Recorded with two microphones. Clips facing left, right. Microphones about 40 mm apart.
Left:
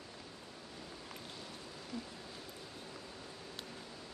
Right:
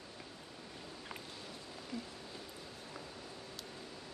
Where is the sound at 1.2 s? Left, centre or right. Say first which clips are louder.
Even; centre.